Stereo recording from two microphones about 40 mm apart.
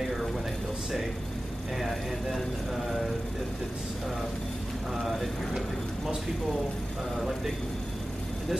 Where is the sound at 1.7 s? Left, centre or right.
Centre.